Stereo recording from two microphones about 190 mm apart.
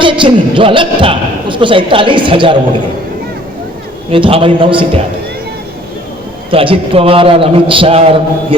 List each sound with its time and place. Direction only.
0.0 s a man's voice: 25° right (ahead or behind)
4.1 s a man's voice: 30° right (ahead or behind)
6.5 s a man's voice: 30° right (ahead or behind)